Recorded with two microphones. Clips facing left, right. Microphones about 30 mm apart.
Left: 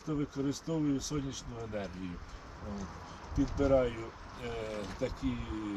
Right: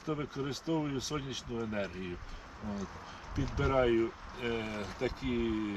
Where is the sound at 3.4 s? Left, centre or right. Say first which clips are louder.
Left 2 dB; right.